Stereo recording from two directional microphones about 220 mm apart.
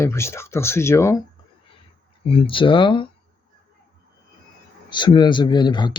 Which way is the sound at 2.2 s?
25° left (ahead or behind).